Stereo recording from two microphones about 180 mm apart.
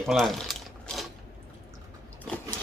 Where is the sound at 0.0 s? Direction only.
Centre (ahead or behind).